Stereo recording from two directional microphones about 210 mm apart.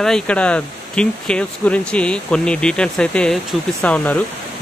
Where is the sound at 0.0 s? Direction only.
5° left (ahead or behind).